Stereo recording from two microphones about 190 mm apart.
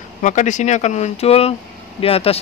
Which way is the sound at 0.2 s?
40° left (ahead or behind).